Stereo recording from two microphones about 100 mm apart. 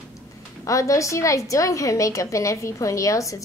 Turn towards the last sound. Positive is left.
turn(degrees=35)  # may be behind; listen again after turning